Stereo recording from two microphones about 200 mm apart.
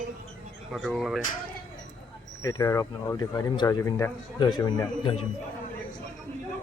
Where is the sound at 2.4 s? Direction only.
15° left (ahead or behind).